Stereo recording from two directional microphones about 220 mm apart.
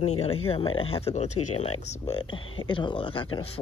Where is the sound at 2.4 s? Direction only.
70° left (ahead or behind).